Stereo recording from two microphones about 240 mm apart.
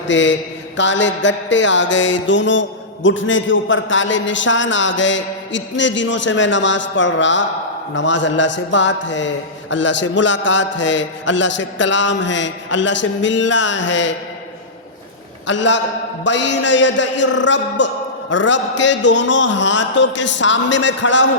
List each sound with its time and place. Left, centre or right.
0.1 s mantra: left
15.4 s mantra: left